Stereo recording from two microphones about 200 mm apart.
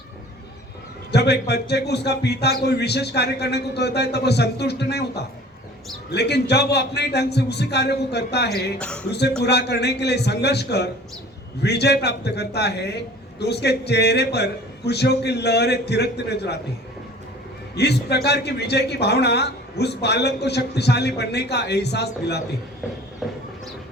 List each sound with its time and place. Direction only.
1.1 s a man's voice: 55° left (ahead or behind)
8.8 s speech: 5° left (ahead or behind)
9.4 s a man's voice: 55° left (ahead or behind)
17.7 s a man's voice: 55° left (ahead or behind)
23.2 s train: centre (ahead or behind)